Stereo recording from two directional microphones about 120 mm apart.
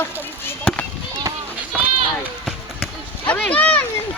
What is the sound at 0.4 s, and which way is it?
Chop, 15° left (ahead or behind).